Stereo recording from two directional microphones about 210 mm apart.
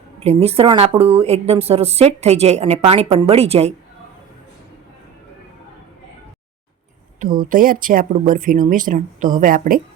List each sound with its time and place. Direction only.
0.2 s a woman's voice: 30° right (ahead or behind)
7.5 s speech: 40° right (ahead or behind)